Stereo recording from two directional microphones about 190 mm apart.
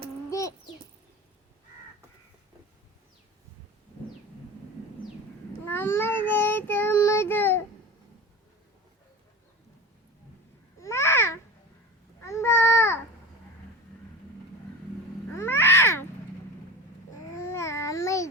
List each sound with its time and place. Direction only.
0.3 s a sound: 15° left (ahead or behind)
5.6 s child singing: 10° left (ahead or behind)
10.8 s babbling: 15° left (ahead or behind)
15.4 s cat: 10° left (ahead or behind)
17.3 s babbling: 15° left (ahead or behind)